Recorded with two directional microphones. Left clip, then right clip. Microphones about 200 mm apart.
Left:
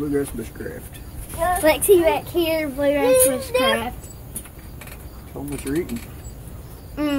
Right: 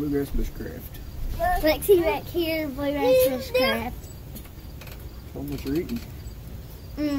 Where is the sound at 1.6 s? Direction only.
10° left (ahead or behind).